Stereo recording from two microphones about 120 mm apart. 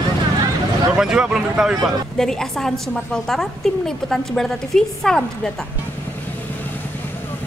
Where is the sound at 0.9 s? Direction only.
5° right (ahead or behind).